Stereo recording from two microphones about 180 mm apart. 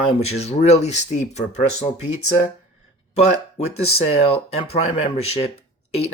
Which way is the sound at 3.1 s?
35° left (ahead or behind).